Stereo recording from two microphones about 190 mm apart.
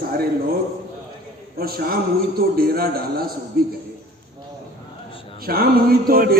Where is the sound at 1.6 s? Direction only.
55° right (ahead or behind).